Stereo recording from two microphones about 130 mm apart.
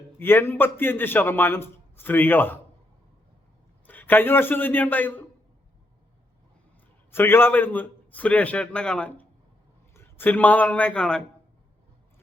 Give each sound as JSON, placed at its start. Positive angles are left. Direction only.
{"t": 0.2, "sound": "a man's voice", "side_deg": 15}
{"t": 3.8, "sound": "a man's voice", "side_deg": 15}
{"t": 7.1, "sound": "a man's voice", "side_deg": 15}